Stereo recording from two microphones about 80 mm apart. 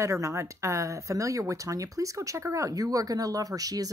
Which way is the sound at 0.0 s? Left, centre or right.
Right.